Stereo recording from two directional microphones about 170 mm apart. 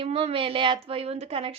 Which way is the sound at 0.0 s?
35° right (ahead or behind).